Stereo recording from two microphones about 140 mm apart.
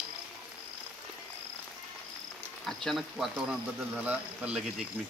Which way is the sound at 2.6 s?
Centre (ahead or behind).